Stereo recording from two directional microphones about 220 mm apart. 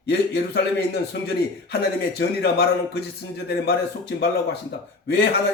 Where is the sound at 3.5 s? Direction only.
45° left (ahead or behind).